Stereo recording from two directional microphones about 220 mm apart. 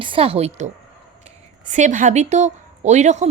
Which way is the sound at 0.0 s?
25° right (ahead or behind).